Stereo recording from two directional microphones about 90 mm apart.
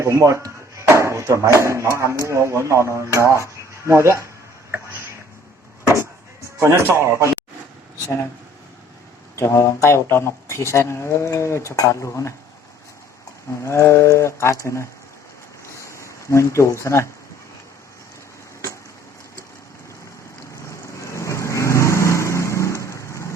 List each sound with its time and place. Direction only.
0.0 s speech: 30° right (ahead or behind)
6.6 s speech: 30° right (ahead or behind)
9.3 s speech: 30° left (ahead or behind)
13.7 s speech: 30° left (ahead or behind)
15.6 s a sound: 35° left (ahead or behind)
20.7 s vehicle: 35° left (ahead or behind)